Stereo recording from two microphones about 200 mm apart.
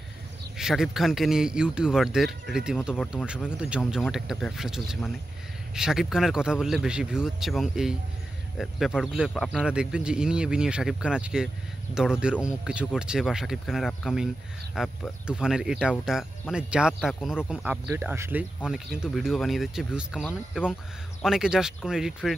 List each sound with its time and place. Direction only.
0.6 s speech: centre (ahead or behind)